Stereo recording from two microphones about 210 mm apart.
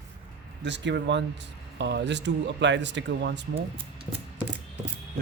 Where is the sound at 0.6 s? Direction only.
55° right (ahead or behind).